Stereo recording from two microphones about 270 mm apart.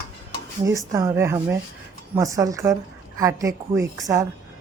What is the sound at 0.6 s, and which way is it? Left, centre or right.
A woman's voice, centre.